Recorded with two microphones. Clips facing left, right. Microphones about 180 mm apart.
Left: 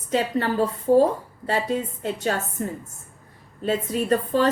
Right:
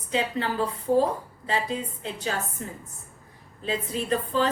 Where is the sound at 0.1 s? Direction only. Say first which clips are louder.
Left 4 dB; 50° left (ahead or behind).